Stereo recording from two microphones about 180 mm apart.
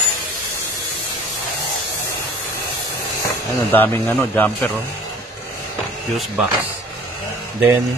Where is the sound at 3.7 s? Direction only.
10° left (ahead or behind).